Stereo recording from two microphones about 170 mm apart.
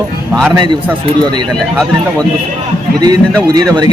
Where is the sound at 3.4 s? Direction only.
25° right (ahead or behind).